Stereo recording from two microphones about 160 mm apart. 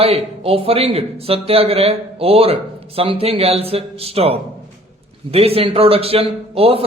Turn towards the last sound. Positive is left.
turn(degrees=-40)  # may be behind; listen again after turning